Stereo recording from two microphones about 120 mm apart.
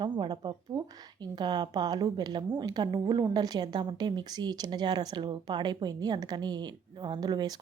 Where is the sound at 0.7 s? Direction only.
35° right (ahead or behind).